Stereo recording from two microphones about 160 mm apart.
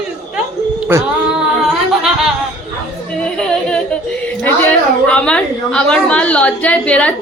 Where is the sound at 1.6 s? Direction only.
Centre (ahead or behind).